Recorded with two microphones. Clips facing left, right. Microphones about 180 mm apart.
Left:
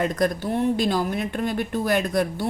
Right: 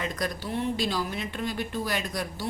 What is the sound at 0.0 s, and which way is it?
A woman's voice, 50° left (ahead or behind).